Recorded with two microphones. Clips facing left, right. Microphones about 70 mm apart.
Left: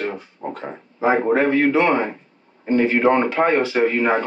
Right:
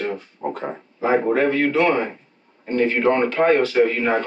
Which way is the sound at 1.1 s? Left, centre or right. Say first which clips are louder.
Left 1 dB; centre.